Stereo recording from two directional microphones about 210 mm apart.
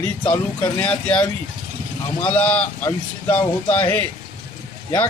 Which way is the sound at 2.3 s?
5° left (ahead or behind).